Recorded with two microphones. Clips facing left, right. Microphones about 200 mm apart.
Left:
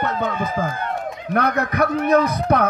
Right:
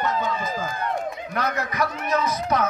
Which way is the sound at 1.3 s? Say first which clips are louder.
Left 9 dB; 60° left (ahead or behind).